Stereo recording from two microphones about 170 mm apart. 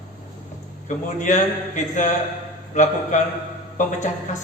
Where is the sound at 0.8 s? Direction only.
45° left (ahead or behind).